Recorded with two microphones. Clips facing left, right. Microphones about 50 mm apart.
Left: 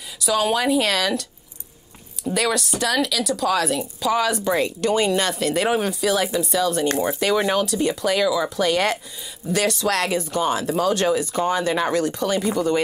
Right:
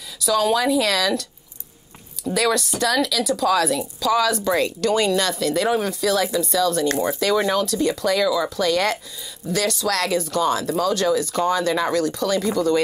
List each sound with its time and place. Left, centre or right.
0.3 s speech: left
2.5 s a woman's voice: centre
3.4 s speech: centre
4.0 s speech: left
7.6 s speech: centre
8.5 s speech: left
11.1 s speech: left